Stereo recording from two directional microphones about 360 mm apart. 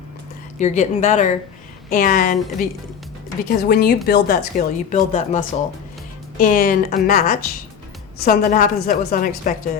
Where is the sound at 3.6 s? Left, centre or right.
Left.